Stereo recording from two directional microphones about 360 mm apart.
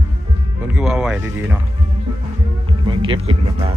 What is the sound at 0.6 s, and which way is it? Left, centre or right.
Music, centre.